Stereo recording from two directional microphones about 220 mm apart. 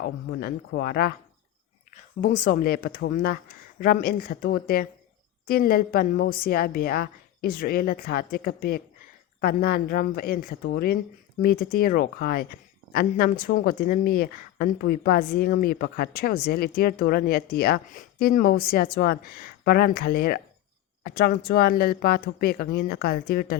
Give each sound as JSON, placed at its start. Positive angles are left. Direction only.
{"t": 0.0, "sound": "speech", "side_deg": 45}